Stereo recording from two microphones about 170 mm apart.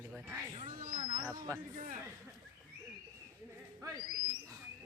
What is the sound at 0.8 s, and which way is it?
Speech, 55° right (ahead or behind).